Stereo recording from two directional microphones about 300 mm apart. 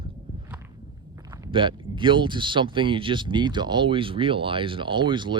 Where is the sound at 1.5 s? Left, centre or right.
Centre.